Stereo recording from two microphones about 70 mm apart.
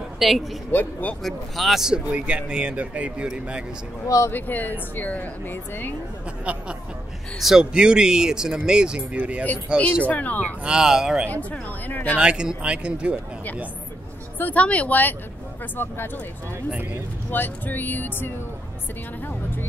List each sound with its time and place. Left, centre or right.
0.2 s speech: centre
0.7 s speech: left
1.2 s speech: centre
2.0 s speech: centre
4.3 s speech: left
7.3 s speech: centre
10.0 s speech: left
10.6 s speech: centre
11.9 s speech: left
12.2 s speech: centre
14.4 s speech: centre
17.3 s speech: left